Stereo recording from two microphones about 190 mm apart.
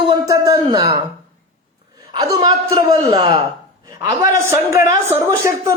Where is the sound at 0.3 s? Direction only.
20° right (ahead or behind).